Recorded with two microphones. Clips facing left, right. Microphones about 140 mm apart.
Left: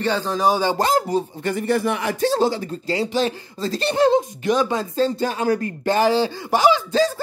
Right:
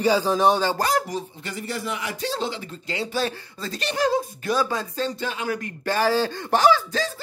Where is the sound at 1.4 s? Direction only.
55° left (ahead or behind); by 6.8 s 15° left (ahead or behind).